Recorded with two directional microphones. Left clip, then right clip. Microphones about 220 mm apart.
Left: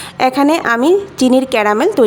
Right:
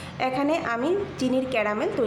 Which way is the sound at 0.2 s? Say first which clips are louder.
Left 12 dB; 55° left (ahead or behind).